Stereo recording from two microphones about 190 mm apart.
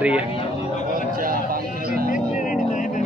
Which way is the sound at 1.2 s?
50° right (ahead or behind).